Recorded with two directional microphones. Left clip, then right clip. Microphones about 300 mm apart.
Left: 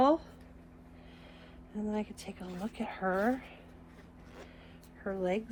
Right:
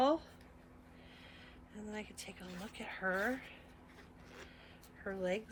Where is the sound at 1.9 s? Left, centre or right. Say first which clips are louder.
Left 8 dB; centre.